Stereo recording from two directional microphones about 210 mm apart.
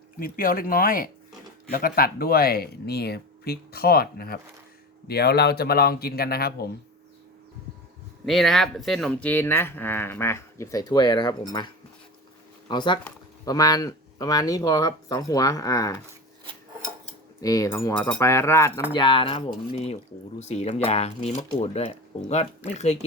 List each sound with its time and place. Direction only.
0.2 s speech: 40° left (ahead or behind)
8.2 s speech: centre (ahead or behind); by 16.0 s 15° left (ahead or behind)
17.4 s speech: 15° left (ahead or behind)
18.9 s speech: 25° left (ahead or behind)